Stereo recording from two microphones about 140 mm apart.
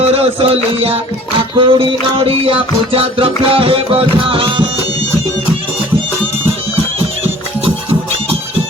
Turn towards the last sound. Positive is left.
turn(degrees=-45)  # may be behind; listen again after turning